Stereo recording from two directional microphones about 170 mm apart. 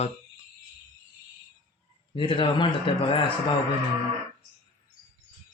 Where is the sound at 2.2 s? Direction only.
30° left (ahead or behind).